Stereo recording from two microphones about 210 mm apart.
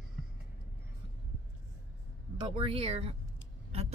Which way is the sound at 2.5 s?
25° right (ahead or behind).